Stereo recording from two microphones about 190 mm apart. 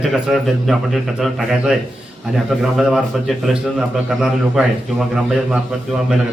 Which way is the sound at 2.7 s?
Centre (ahead or behind).